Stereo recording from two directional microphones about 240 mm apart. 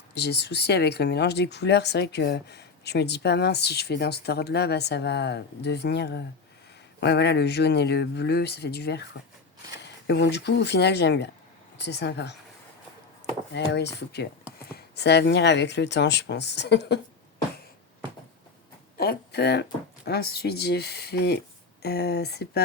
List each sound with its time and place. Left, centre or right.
0.1 s speech: left
13.7 s speech: left
18.9 s a sound: left
20.1 s speech: left